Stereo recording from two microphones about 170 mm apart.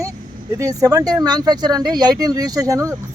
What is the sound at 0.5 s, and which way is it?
Speech, 20° right (ahead or behind).